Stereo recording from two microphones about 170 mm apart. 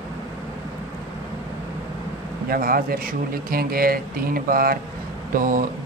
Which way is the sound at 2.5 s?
60° right (ahead or behind).